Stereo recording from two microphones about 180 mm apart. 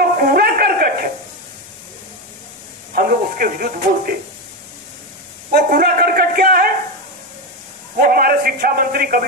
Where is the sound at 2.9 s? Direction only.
55° right (ahead or behind).